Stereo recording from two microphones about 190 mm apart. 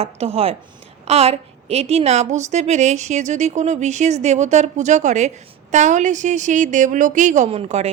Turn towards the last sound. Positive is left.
turn(degrees=-35)  # may be behind; listen again after turning